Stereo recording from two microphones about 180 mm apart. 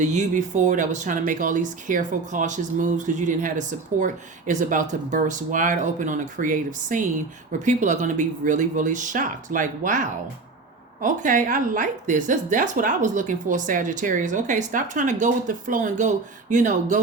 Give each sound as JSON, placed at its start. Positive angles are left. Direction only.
{"t": 0.0, "sound": "speech", "side_deg": -40}